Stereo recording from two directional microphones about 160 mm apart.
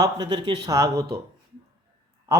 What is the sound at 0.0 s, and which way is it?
Speech, 25° right (ahead or behind).